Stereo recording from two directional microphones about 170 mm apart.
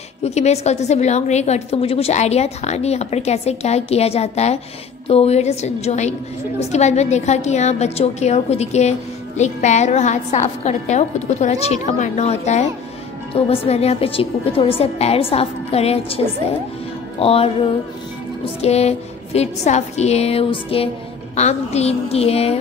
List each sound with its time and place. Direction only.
0.2 s a woman's voice: 40° left (ahead or behind)